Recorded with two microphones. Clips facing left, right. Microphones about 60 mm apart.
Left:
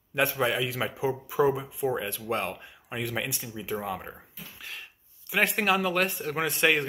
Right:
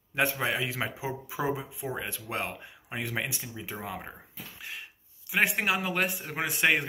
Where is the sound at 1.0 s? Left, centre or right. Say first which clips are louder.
Left 10 dB; centre.